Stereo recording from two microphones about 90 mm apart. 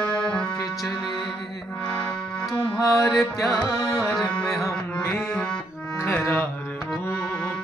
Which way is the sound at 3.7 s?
35° left (ahead or behind).